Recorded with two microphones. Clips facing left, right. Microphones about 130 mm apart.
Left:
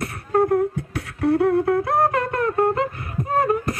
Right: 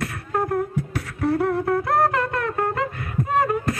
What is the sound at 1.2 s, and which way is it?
Wind instrument, 25° left (ahead or behind).